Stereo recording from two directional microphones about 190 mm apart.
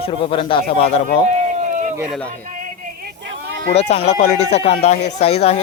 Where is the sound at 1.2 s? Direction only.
40° right (ahead or behind).